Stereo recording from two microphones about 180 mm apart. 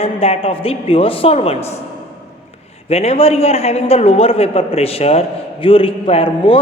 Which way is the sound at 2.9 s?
35° left (ahead or behind).